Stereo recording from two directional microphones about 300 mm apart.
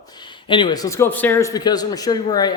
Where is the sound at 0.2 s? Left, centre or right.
Centre.